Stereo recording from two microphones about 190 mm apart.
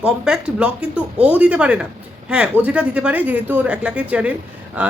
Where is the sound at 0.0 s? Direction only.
5° right (ahead or behind).